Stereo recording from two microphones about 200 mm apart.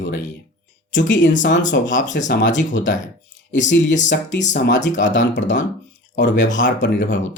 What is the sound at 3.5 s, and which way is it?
Speech, 65° left (ahead or behind).